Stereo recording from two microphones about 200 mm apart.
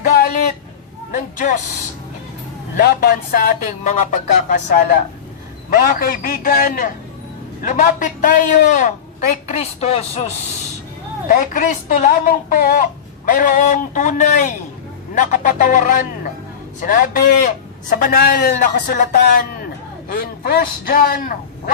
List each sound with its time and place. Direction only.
0.0 s a sound: 45° left (ahead or behind)
1.1 s speech: 40° left (ahead or behind)
2.7 s a woman's voice: 50° left (ahead or behind)